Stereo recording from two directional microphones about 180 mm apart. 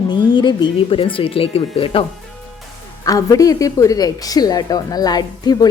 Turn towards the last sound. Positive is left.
turn(degrees=20)  # may be behind; listen again after turning